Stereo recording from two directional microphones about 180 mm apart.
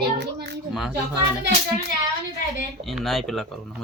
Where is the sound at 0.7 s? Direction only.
Centre (ahead or behind).